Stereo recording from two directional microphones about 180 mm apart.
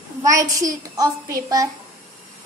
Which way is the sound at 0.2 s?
20° right (ahead or behind).